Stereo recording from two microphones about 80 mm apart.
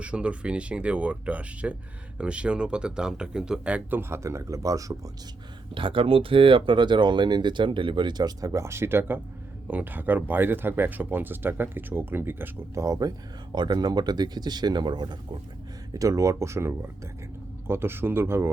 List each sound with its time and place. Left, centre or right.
0.0 s speech: centre
4.2 s speech: right
5.7 s speech: right
12.7 s speech: right
15.9 s speech: right